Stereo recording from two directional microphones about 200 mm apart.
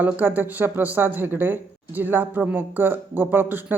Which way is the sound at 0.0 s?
10° right (ahead or behind).